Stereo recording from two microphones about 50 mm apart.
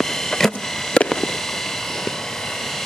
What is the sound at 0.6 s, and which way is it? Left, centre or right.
Fireworks, centre.